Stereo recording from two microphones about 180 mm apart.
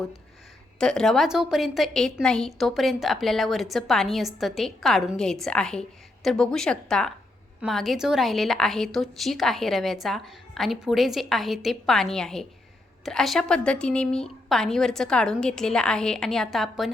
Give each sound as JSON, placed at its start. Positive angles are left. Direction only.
{"t": 0.8, "sound": "a woman's voice", "side_deg": 5}